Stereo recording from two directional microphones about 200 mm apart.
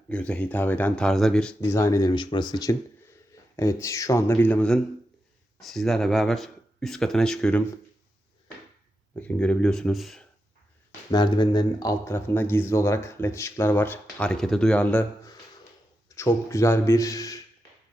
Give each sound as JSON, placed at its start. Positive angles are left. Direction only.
{"t": 0.1, "sound": "speech", "side_deg": 5}
{"t": 9.1, "sound": "speech", "side_deg": 5}
{"t": 11.1, "sound": "speech", "side_deg": 20}